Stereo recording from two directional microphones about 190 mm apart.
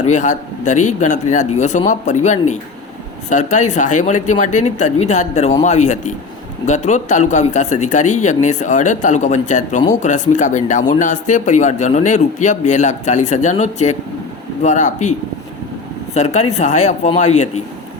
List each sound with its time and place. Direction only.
0.1 s speech: 40° left (ahead or behind)
16.1 s speech: 35° left (ahead or behind)